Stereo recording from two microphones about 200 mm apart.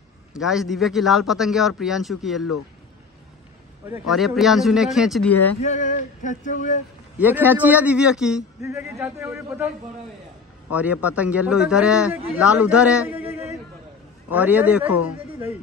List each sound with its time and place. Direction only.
0.3 s speech: centre (ahead or behind)
4.1 s speech: centre (ahead or behind)
5.6 s male singing: 35° left (ahead or behind)
7.2 s a man's voice: 10° right (ahead or behind)
8.6 s a man's voice: 15° right (ahead or behind)
10.7 s a man's voice: 5° right (ahead or behind)